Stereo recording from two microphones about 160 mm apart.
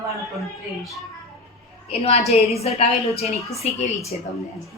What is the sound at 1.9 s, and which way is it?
A woman's voice, 40° left (ahead or behind).